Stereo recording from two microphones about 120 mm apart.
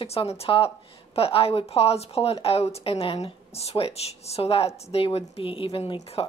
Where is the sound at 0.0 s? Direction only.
55° left (ahead or behind).